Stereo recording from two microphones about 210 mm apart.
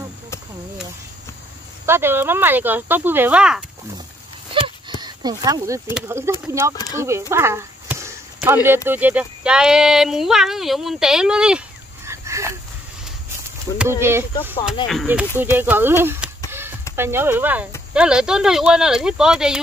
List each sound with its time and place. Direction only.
1.9 s speech: 10° right (ahead or behind)
5.0 s speech: 20° right (ahead or behind)
7.0 s chop: 15° right (ahead or behind)
8.6 s speech: 10° right (ahead or behind)
12.1 s a sound: 15° right (ahead or behind)
13.7 s speech: 10° right (ahead or behind)
16.4 s a sound: 10° right (ahead or behind)
16.9 s speech: 10° right (ahead or behind)